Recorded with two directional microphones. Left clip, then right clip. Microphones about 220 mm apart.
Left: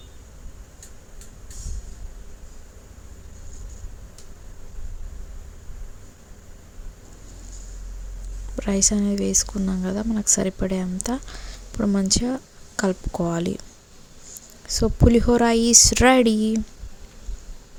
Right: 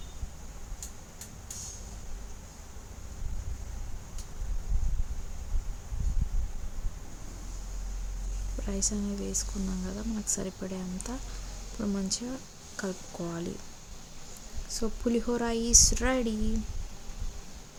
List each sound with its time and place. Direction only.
8.6 s speech: 35° left (ahead or behind)
14.7 s speech: 35° left (ahead or behind)